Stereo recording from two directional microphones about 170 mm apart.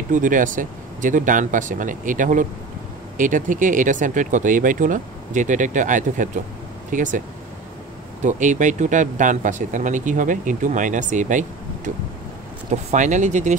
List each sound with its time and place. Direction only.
0.1 s speech: 50° right (ahead or behind)